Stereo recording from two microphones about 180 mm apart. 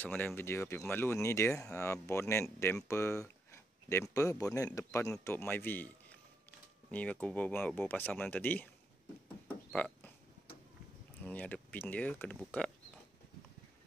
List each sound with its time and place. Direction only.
0.2 s speech: 15° left (ahead or behind)
9.7 s speech: 5° left (ahead or behind)
11.2 s speech: 10° left (ahead or behind)